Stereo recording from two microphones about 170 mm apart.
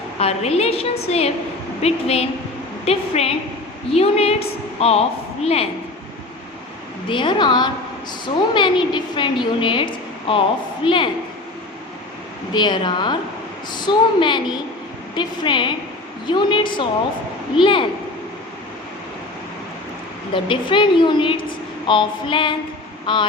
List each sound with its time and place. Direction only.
0.2 s a woman's voice: 35° left (ahead or behind)
7.1 s a woman's voice: 25° left (ahead or behind)
12.5 s a woman's voice: 25° left (ahead or behind)
20.3 s a woman's voice: 30° left (ahead or behind)